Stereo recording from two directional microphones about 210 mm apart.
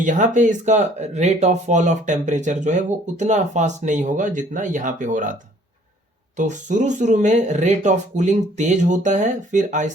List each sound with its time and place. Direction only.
0.0 s speech: 35° right (ahead or behind)